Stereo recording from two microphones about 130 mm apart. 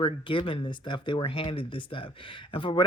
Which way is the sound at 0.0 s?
40° left (ahead or behind).